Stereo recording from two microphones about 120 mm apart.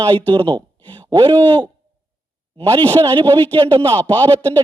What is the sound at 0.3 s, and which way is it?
Speech, 35° right (ahead or behind).